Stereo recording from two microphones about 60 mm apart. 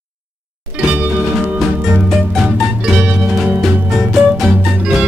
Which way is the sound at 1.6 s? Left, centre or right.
Centre.